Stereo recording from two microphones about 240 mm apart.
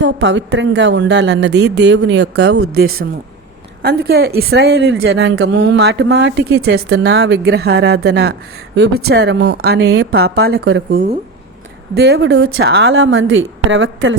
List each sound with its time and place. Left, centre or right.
0.0 s a woman's voice: right